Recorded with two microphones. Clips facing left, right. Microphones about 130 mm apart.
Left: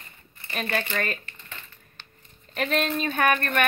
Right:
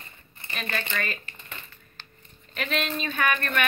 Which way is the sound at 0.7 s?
35° left (ahead or behind).